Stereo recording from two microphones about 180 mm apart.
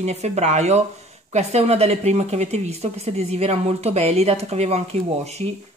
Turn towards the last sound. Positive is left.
turn(degrees=-35)  # may be behind; listen again after turning